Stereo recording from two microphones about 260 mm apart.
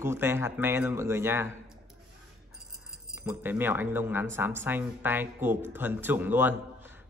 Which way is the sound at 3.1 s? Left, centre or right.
Centre.